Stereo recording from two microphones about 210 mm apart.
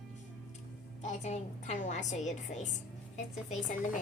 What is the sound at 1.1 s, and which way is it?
Speech, 35° left (ahead or behind).